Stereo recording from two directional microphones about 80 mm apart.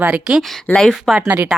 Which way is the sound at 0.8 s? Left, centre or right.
Centre.